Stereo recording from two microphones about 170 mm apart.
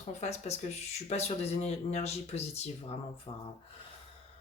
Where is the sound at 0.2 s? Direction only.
40° left (ahead or behind).